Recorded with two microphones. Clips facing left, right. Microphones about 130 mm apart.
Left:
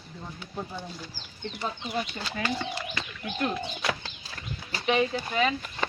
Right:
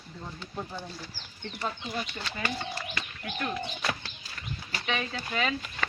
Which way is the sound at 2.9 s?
30° left (ahead or behind).